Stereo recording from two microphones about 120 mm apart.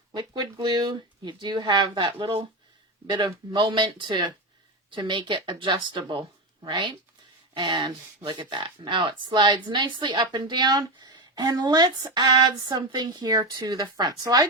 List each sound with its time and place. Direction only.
0.1 s a sound: 35° right (ahead or behind)
0.6 s speech: 35° right (ahead or behind)
3.1 s speech: 35° right (ahead or behind)